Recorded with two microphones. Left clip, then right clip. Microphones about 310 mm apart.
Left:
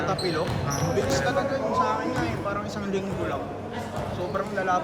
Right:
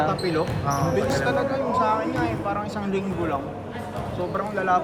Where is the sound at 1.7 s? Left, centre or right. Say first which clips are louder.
Right 4 dB; right.